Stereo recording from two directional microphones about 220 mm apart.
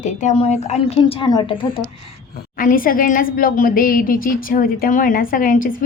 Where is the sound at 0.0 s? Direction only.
35° left (ahead or behind).